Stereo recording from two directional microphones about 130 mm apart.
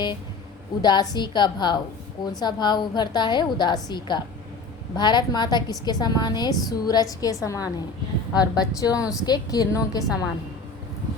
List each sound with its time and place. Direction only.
0.8 s a woman's voice: 35° left (ahead or behind)